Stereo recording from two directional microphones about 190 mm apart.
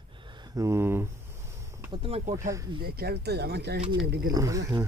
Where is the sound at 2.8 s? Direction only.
55° right (ahead or behind).